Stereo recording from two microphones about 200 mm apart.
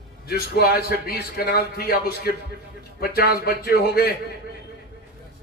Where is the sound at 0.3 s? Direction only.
50° left (ahead or behind).